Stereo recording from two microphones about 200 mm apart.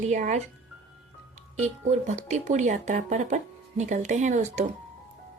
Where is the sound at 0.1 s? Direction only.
40° right (ahead or behind).